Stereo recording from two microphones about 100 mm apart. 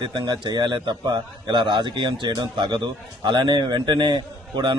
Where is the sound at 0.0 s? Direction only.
50° right (ahead or behind).